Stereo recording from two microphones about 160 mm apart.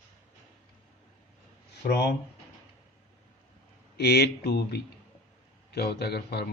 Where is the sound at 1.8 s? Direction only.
90° left.